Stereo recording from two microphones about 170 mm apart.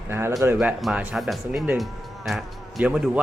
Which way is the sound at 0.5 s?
5° right (ahead or behind).